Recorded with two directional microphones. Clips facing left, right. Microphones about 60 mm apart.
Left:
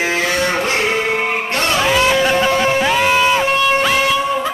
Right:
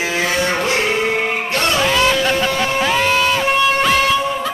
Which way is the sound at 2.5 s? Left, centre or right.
Left.